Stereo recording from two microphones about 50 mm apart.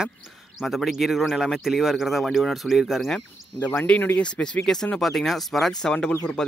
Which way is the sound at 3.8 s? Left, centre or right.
Left.